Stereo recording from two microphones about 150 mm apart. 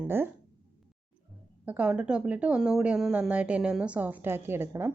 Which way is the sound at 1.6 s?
10° right (ahead or behind).